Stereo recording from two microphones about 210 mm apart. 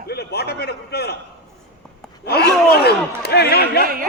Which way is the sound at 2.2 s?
50° left (ahead or behind).